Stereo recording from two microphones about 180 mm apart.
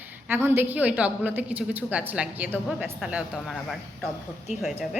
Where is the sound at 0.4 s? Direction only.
10° right (ahead or behind).